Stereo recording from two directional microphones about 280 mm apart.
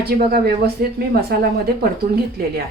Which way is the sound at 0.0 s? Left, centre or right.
Right.